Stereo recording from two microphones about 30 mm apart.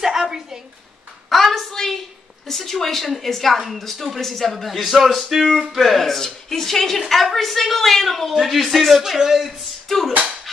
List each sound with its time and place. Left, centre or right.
0.0 s a sound: centre
1.3 s a sound: centre
2.4 s speech: centre
8.3 s speech: centre
9.0 s speech: centre
9.8 s speech: centre